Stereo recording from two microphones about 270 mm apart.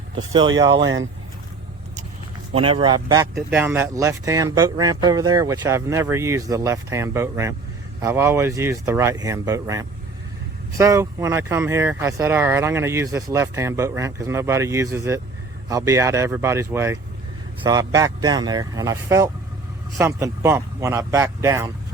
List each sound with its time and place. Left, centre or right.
0.2 s speech: centre
2.6 s speech: centre